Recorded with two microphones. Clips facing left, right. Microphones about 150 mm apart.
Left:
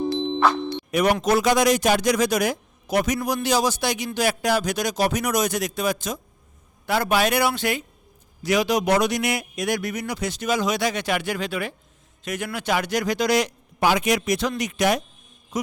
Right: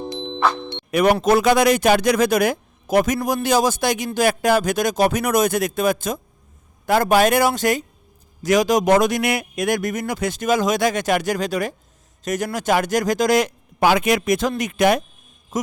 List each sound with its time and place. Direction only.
0.9 s a man's voice: 60° right (ahead or behind); by 15.7 s 45° right (ahead or behind)